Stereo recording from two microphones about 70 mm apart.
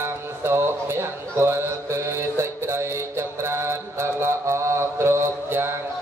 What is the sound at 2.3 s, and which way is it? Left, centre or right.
Mantra, right.